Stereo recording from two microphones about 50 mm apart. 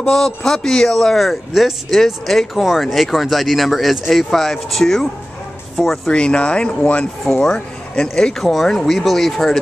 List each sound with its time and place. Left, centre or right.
0.1 s speech: centre
6.1 s speech: left; by 9.6 s centre